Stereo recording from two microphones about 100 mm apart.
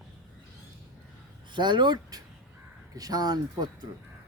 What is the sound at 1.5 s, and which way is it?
Speech, 50° right (ahead or behind).